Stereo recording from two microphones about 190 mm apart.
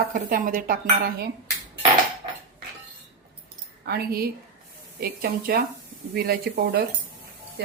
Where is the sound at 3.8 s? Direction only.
55° right (ahead or behind).